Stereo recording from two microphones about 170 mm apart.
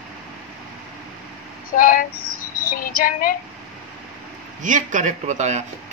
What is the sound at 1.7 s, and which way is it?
A woman's voice, 55° left (ahead or behind).